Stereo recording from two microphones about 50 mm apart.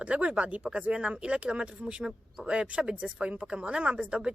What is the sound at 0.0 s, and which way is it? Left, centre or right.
Speech, right.